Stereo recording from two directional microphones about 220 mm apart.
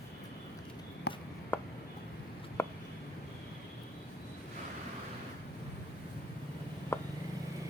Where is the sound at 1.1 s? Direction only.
50° left (ahead or behind).